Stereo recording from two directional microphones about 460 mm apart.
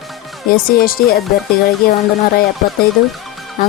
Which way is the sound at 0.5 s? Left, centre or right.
Centre.